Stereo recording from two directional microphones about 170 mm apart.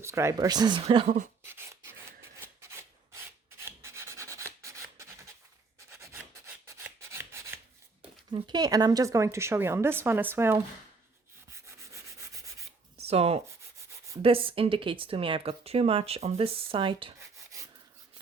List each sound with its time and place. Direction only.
0.0 s speech: 15° right (ahead or behind); by 1.3 s 45° right (ahead or behind)
1.5 s rub: 15° right (ahead or behind)
5.9 s filing: 15° right (ahead or behind)
8.3 s a woman's voice: 25° right (ahead or behind)
11.6 s sanding: 20° right (ahead or behind)
13.0 s speech: 35° right (ahead or behind)
17.5 s rub: 20° right (ahead or behind)